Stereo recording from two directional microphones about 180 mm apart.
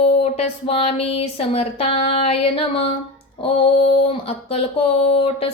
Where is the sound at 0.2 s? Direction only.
35° left (ahead or behind).